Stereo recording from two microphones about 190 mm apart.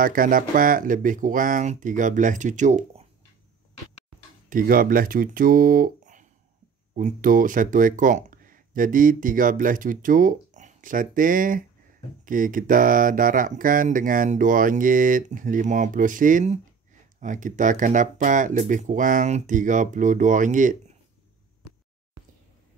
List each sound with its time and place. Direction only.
0.0 s speech: 45° right (ahead or behind)
4.5 s speech: 50° right (ahead or behind)